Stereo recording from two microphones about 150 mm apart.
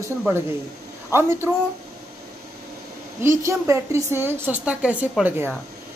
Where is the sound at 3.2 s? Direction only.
20° right (ahead or behind).